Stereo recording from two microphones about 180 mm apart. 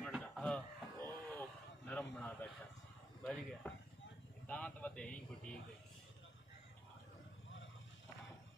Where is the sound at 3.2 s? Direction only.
5° left (ahead or behind).